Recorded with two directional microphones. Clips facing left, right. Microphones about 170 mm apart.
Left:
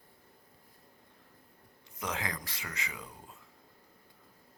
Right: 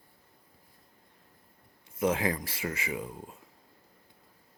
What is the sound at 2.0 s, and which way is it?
Speech, 25° right (ahead or behind).